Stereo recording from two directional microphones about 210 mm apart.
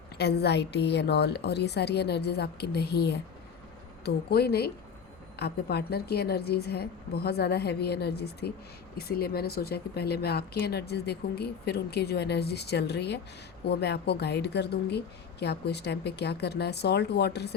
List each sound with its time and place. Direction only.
0.2 s speech: 50° left (ahead or behind)